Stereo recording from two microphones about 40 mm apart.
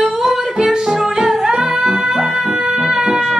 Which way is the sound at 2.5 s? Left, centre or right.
Right.